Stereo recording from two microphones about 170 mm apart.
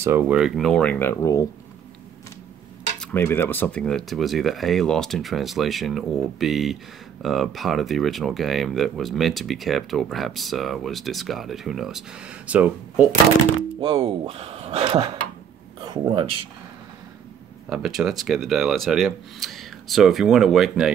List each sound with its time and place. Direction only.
0.0 s speech: 10° right (ahead or behind); by 1.5 s 20° left (ahead or behind)
3.0 s speech: 10° left (ahead or behind); by 13.1 s 10° right (ahead or behind)
13.7 s speech: 35° right (ahead or behind)
15.8 s speech: 25° right (ahead or behind)
17.6 s speech: 5° right (ahead or behind)